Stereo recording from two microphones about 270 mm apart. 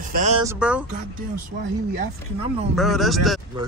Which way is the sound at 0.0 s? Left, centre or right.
Right.